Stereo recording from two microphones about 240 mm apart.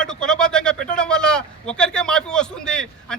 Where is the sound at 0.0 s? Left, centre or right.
Centre.